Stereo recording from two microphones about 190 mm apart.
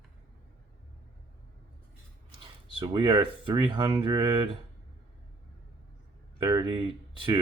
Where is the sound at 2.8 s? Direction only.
20° right (ahead or behind).